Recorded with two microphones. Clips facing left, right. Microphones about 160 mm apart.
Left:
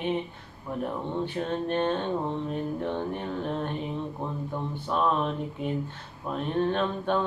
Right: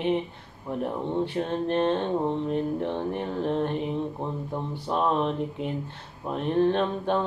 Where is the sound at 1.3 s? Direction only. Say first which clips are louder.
Right 1 dB; 30° right (ahead or behind).